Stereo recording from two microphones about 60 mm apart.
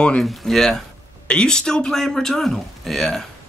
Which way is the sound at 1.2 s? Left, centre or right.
Centre.